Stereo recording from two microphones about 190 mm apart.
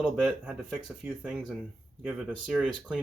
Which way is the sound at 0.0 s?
Centre (ahead or behind).